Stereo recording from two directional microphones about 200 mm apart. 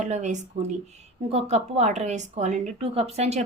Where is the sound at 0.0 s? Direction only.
35° right (ahead or behind).